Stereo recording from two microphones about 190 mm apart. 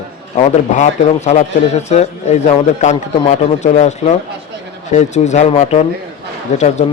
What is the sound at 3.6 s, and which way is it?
Speech, 35° left (ahead or behind).